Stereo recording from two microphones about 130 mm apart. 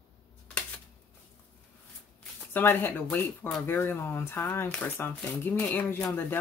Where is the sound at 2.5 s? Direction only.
15° left (ahead or behind).